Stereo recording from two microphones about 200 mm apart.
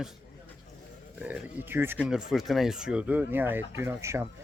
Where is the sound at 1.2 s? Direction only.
10° right (ahead or behind).